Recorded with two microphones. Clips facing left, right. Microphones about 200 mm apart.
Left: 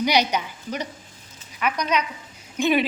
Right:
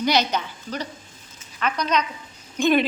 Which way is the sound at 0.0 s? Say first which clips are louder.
Even; 10° left (ahead or behind).